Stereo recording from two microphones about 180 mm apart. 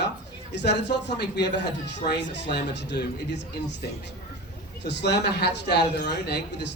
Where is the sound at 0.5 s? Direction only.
70° left (ahead or behind).